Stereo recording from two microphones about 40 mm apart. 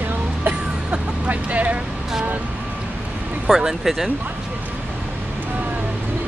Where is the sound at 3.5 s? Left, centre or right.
Centre.